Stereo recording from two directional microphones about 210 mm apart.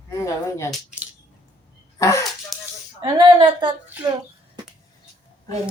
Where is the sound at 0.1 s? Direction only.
15° left (ahead or behind).